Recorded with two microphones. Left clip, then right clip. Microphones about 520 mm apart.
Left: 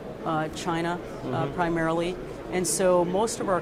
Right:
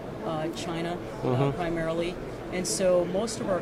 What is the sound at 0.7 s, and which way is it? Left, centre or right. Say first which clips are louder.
Speech: left 4 dB; left.